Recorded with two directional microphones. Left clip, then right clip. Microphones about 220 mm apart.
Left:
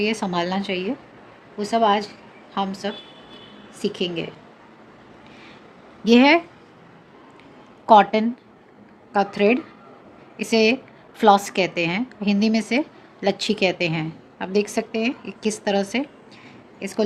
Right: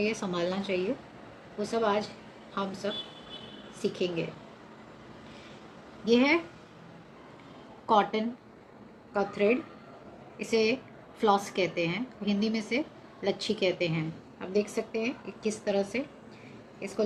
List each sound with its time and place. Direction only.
0.0 s a woman's voice: 45° left (ahead or behind)
6.1 s a woman's voice: 50° left (ahead or behind)
7.9 s a woman's voice: 45° left (ahead or behind)